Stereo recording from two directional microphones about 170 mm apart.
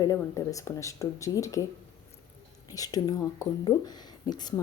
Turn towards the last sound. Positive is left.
turn(degrees=25)  # may be behind; listen again after turning